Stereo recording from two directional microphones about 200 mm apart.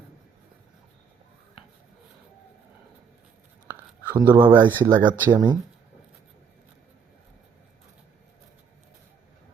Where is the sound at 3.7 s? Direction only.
10° right (ahead or behind).